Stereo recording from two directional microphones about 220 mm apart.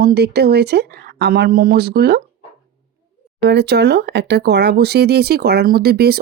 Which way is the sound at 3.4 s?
50° right (ahead or behind).